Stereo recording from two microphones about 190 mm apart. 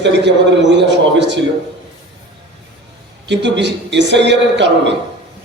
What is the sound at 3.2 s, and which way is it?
A man's voice, 70° right (ahead or behind).